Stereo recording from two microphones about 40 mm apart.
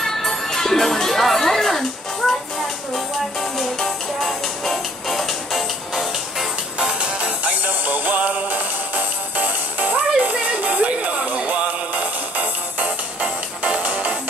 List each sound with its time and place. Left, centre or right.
0.0 s music: centre
2.9 s music: centre
7.2 s music: right